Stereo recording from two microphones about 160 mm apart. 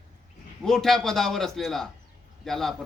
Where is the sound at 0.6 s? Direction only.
Centre (ahead or behind).